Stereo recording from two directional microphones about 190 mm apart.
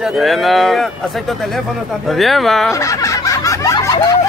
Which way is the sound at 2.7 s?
15° left (ahead or behind).